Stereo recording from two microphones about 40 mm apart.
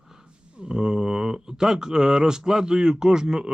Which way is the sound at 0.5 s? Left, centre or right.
Centre.